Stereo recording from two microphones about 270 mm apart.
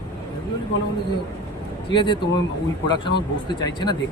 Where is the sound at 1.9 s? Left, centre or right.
Centre.